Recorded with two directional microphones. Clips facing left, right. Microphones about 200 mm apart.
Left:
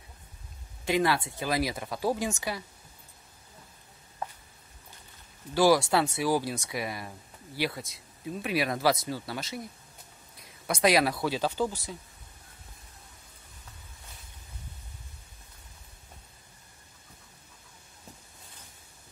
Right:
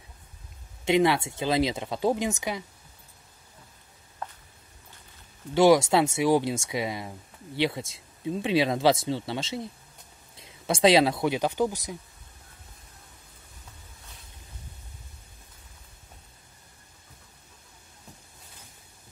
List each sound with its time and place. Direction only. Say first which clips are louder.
0.8 s speech: right 4 dB; 20° right (ahead or behind)
5.5 s speech: right 4 dB; 20° right (ahead or behind)